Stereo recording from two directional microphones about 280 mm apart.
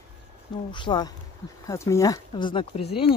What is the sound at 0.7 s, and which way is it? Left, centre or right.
Speech, centre.